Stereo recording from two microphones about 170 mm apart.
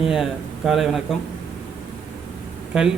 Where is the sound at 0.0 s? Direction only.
Centre (ahead or behind).